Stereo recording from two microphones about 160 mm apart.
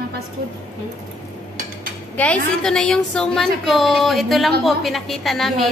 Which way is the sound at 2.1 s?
10° left (ahead or behind).